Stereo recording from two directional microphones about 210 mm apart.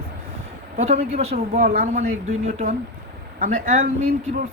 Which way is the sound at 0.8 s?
30° right (ahead or behind).